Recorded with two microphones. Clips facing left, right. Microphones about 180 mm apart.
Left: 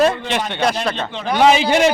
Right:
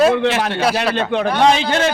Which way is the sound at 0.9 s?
60° right (ahead or behind).